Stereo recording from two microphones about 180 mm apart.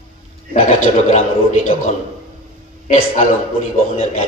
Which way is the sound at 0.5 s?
45° left (ahead or behind).